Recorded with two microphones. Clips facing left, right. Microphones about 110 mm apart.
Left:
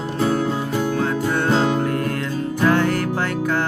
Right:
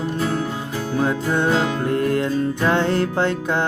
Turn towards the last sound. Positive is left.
turn(degrees=-25)  # may be behind; listen again after turning